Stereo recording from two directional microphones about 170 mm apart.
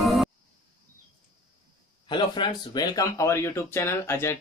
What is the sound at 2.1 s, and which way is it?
Speech, 25° left (ahead or behind).